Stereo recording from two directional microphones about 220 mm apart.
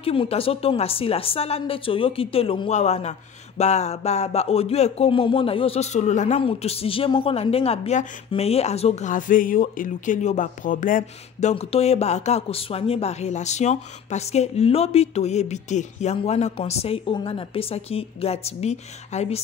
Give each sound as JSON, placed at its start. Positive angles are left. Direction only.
{"t": 0.0, "sound": "a woman's voice", "side_deg": 25}